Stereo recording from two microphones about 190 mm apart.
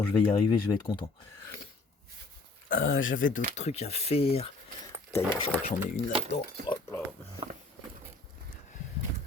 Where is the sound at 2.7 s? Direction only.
90° left.